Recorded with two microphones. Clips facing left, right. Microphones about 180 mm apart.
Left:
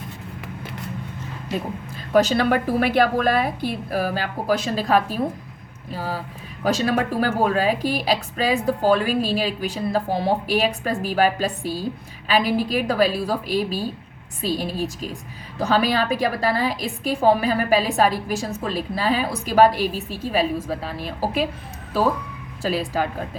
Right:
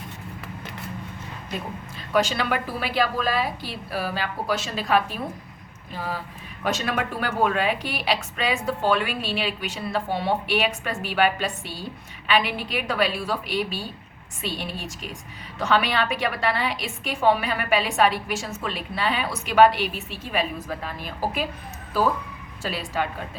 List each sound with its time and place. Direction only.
2.1 s a woman's voice: 40° left (ahead or behind)
22.6 s speech: 35° left (ahead or behind)